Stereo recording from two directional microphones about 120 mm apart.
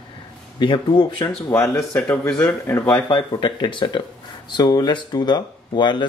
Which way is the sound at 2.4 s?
20° left (ahead or behind).